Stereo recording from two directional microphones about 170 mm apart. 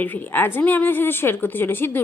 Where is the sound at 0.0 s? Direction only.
10° left (ahead or behind).